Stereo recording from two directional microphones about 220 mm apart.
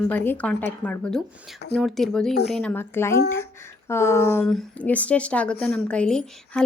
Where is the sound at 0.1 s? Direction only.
10° left (ahead or behind).